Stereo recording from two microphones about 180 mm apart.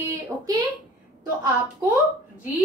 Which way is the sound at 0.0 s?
20° right (ahead or behind).